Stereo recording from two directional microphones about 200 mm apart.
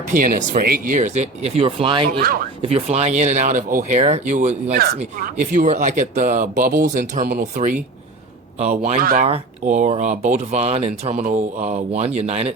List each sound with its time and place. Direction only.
0.1 s speech: 45° right (ahead or behind); by 2.0 s 25° right (ahead or behind)
2.1 s speech: 50° right (ahead or behind)
2.6 s speech: 30° right (ahead or behind)
9.0 s speech: 50° right (ahead or behind)
9.2 s speech: 35° right (ahead or behind)